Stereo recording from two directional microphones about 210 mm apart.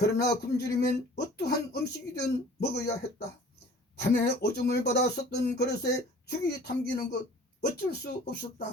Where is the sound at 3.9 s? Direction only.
50° left (ahead or behind).